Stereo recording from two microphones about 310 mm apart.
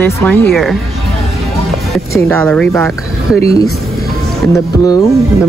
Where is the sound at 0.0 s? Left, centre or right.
Centre.